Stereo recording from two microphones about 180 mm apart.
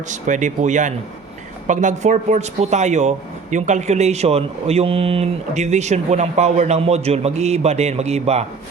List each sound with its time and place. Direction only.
0.1 s speech: 45° right (ahead or behind)